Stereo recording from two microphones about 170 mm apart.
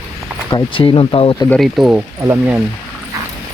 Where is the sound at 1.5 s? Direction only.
Centre (ahead or behind).